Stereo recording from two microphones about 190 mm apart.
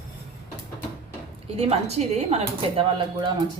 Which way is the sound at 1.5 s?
30° right (ahead or behind).